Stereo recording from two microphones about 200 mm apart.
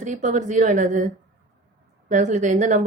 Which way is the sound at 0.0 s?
35° right (ahead or behind).